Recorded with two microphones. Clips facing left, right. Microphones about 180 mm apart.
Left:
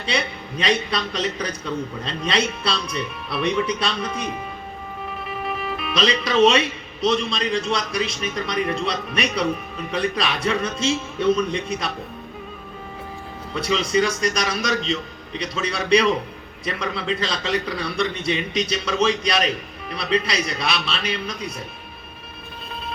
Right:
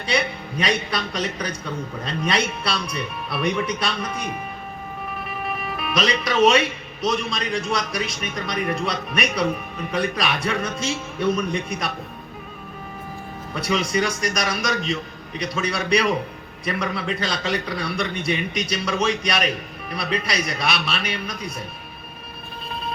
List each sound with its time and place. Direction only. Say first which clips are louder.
0.0 s a man's voice: right 2 dB; 30° left (ahead or behind)
5.9 s a man's voice: left 1 dB; 30° left (ahead or behind)
13.6 s a man's voice: left 2 dB; 30° left (ahead or behind)